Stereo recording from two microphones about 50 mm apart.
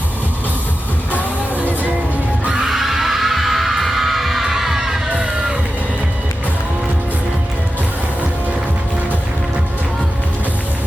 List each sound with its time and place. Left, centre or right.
1.5 s music: right
2.6 s music: centre
5.1 s music: right